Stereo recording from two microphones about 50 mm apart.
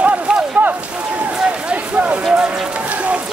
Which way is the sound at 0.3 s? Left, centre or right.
Centre.